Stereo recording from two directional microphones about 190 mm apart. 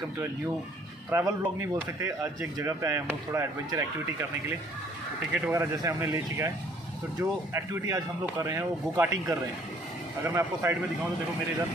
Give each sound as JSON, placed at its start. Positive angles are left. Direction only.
{"t": 1.1, "sound": "speech", "side_deg": -15}
{"t": 5.3, "sound": "speech", "side_deg": -10}